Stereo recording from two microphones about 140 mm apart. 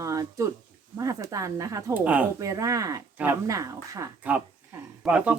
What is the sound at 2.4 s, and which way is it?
Speech, 25° right (ahead or behind).